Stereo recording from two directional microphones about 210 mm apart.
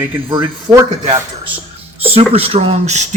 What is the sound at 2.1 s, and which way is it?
Speech, 30° right (ahead or behind).